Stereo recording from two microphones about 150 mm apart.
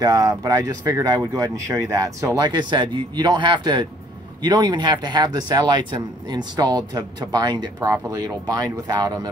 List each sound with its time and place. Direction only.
0.0 s speech: 25° right (ahead or behind)